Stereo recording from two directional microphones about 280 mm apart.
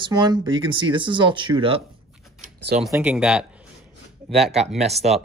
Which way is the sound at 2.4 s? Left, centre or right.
Right.